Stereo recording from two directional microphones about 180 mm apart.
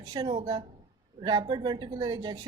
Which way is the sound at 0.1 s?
20° right (ahead or behind).